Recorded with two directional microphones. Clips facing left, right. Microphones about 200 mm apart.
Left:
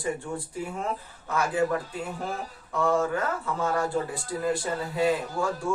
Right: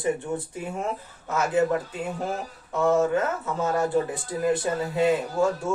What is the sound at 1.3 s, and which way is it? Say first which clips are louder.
Speech: right 3 dB; 20° right (ahead or behind).